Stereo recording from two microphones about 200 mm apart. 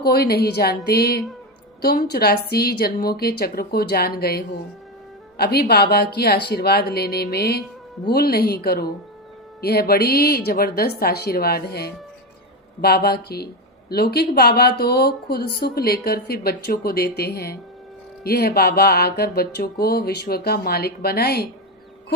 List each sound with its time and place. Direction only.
0.0 s speech: 50° left (ahead or behind)